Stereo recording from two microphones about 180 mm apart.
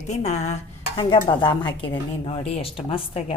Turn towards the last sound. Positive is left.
turn(degrees=30)  # may be behind; listen again after turning